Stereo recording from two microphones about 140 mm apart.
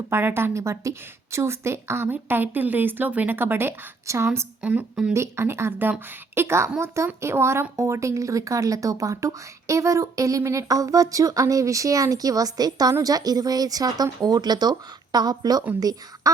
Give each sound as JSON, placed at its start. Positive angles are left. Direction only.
{"t": 0.1, "sound": "a woman's voice", "side_deg": -15}